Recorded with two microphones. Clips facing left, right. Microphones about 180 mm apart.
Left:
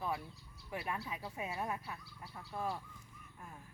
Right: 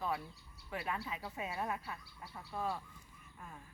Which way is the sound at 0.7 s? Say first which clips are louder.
Right 1 dB; 10° left (ahead or behind).